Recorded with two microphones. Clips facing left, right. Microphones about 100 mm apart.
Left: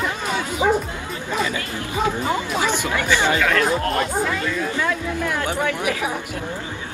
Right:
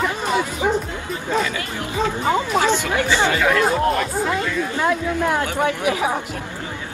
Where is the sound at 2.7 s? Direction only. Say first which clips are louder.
Right 3 dB; 15° left (ahead or behind).